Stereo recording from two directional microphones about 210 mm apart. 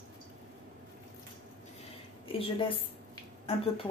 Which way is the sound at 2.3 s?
25° left (ahead or behind).